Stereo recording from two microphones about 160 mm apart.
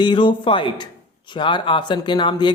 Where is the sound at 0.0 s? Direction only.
30° left (ahead or behind).